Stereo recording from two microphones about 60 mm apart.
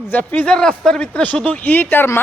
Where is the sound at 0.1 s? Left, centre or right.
Left.